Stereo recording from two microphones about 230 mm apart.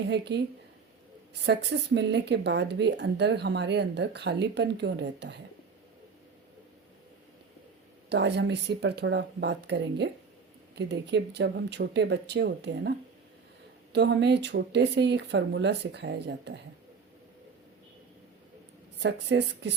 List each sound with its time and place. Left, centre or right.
0.1 s speech: right
8.1 s speech: right
13.9 s speech: right
18.9 s speech: right